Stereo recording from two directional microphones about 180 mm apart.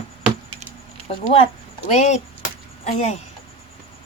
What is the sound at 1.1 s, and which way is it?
Speech, 30° left (ahead or behind).